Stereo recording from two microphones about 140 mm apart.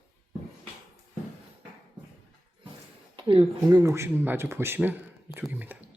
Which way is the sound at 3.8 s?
20° right (ahead or behind).